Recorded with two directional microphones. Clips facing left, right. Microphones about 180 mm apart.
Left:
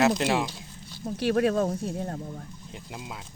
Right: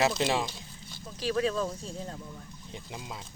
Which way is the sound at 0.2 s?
Centre (ahead or behind).